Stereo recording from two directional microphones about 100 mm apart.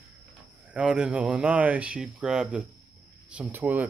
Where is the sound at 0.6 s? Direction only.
10° right (ahead or behind).